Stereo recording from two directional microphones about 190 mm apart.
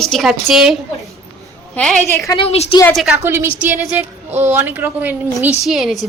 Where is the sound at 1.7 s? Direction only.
5° left (ahead or behind).